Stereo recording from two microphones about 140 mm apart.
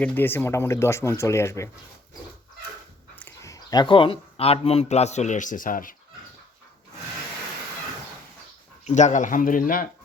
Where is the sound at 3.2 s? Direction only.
20° left (ahead or behind); by 5.9 s 75° left (ahead or behind).